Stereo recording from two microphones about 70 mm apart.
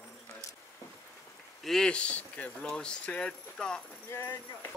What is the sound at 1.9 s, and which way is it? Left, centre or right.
Speech, centre.